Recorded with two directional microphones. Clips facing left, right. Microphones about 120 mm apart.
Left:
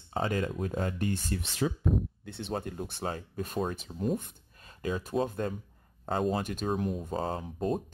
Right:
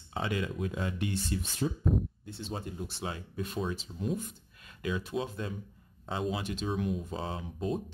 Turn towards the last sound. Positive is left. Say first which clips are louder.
# left 3 dB
turn(degrees=45)  # may be behind; listen again after turning